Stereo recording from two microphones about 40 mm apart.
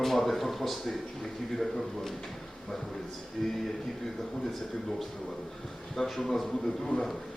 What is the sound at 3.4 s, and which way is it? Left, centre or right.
Speech, centre.